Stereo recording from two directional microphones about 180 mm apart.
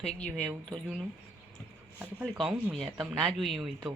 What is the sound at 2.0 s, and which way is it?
Speech, 10° right (ahead or behind).